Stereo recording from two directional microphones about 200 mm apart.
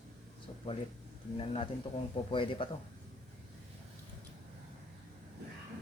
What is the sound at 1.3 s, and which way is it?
Speech, 30° left (ahead or behind).